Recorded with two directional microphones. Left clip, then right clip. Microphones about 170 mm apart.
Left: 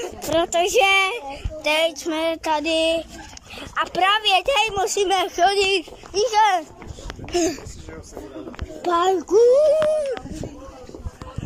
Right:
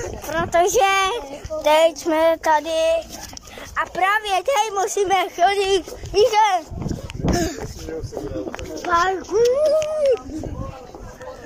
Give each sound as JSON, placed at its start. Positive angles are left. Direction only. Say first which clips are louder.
{"t": 0.0, "sound": "speech", "louder": "left 3 dB", "side_deg": 25}
{"t": 0.5, "sound": "a child's voice", "louder": "right 3 dB", "side_deg": 5}
{"t": 1.1, "sound": "a woman's voice", "louder": "right 4 dB", "side_deg": 0}
{"t": 7.3, "sound": "a child's voice", "louder": "left 4 dB", "side_deg": 15}
{"t": 8.8, "sound": "a child's voice", "louder": "even", "side_deg": 15}